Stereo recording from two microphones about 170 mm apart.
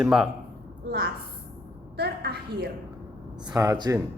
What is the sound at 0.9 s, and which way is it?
Speech, 65° right (ahead or behind).